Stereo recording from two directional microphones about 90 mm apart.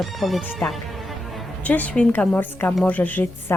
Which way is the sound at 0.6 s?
15° left (ahead or behind).